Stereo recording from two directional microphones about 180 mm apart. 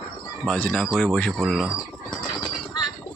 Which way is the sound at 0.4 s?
5° left (ahead or behind).